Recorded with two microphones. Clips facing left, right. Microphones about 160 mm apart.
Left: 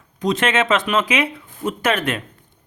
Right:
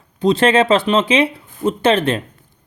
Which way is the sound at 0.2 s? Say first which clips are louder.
Right 6 dB; 30° right (ahead or behind).